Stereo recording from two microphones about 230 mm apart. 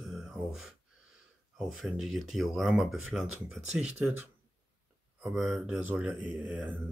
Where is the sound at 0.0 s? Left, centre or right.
Centre.